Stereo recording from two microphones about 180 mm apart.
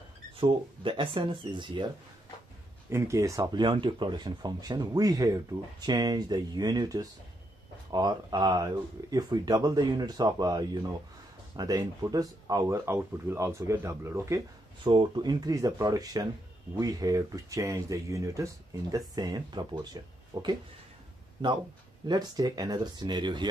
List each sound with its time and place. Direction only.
0.4 s speech: 30° right (ahead or behind)
2.9 s speech: 15° right (ahead or behind)
22.0 s speech: 20° right (ahead or behind)